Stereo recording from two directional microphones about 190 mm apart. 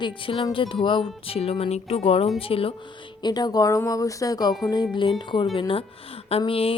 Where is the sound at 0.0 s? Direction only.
25° left (ahead or behind).